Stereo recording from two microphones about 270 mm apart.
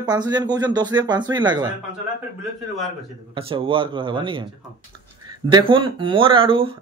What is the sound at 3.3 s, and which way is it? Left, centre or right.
Speech, centre.